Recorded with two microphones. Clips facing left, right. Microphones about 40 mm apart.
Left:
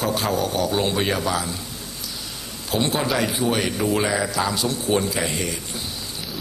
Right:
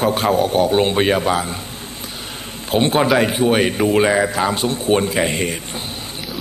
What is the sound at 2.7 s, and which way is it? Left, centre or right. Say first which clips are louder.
A man's voice: right 7 dB; right.